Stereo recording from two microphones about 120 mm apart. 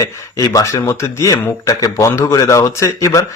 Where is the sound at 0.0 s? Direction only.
30° left (ahead or behind).